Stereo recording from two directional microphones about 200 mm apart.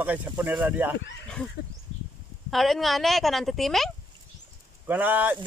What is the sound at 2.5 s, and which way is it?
A woman's voice, centre (ahead or behind).